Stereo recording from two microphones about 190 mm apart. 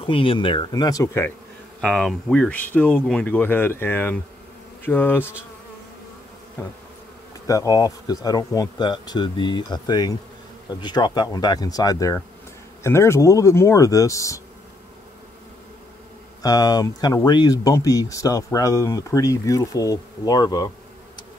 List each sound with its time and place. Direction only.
0.0 s speech: 25° left (ahead or behind)
1.8 s speech: centre (ahead or behind)
7.4 s speech: 20° left (ahead or behind)
16.4 s speech: 20° left (ahead or behind)